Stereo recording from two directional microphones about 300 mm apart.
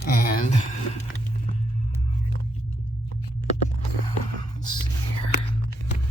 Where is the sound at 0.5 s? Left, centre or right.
Left.